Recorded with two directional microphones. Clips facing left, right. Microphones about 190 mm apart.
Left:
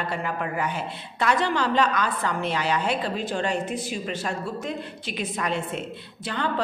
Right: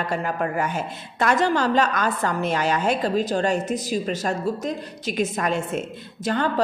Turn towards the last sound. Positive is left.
turn(degrees=-45)  # may be behind; listen again after turning